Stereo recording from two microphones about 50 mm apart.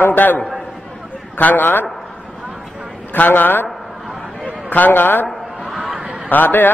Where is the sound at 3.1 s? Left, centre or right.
Left.